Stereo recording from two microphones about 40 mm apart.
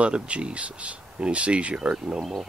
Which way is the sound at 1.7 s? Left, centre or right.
Centre.